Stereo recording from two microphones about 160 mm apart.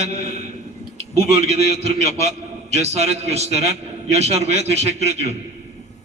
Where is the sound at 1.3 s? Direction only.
40° right (ahead or behind).